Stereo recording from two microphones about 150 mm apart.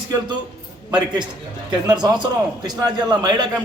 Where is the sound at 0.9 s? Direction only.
30° right (ahead or behind).